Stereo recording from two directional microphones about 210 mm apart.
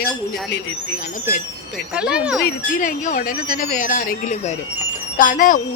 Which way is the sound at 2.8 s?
40° left (ahead or behind).